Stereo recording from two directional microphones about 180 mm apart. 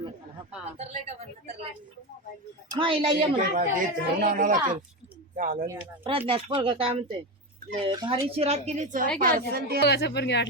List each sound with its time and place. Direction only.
0.8 s a woman's voice: 40° right (ahead or behind)
2.6 s speech: 30° right (ahead or behind)
3.3 s speech: 50° right (ahead or behind)
5.6 s speech: 10° right (ahead or behind)
6.1 s a woman's voice: 30° right (ahead or behind); by 9.8 s 60° right (ahead or behind)
9.8 s speech: 65° left (ahead or behind)